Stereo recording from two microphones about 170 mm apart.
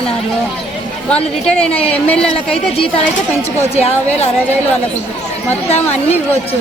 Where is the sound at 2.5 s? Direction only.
35° left (ahead or behind).